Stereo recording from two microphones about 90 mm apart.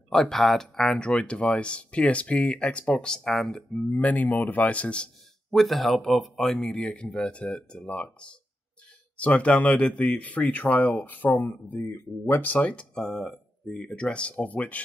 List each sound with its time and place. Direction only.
0.1 s a man's voice: 5° left (ahead or behind)
3.9 s a man's voice: 20° left (ahead or behind)